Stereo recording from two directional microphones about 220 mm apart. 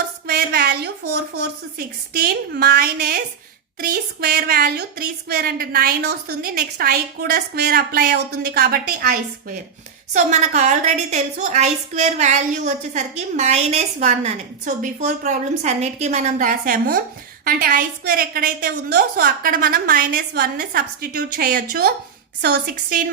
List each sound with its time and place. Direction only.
0.3 s a woman's voice: 45° right (ahead or behind)